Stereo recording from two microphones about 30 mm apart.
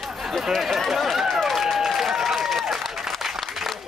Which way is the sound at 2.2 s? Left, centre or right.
Centre.